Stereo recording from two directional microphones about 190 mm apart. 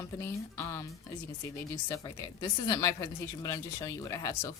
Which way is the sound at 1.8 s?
20° left (ahead or behind).